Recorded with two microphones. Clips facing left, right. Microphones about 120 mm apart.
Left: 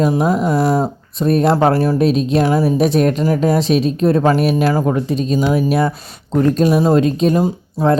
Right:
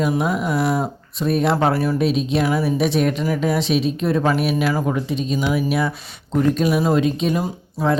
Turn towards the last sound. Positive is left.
turn(degrees=35)  # may be behind; listen again after turning